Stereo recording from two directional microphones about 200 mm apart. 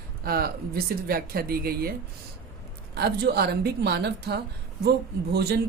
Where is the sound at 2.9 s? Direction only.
55° right (ahead or behind).